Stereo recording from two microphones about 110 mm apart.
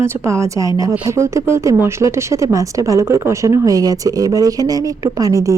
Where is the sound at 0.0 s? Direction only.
25° right (ahead or behind).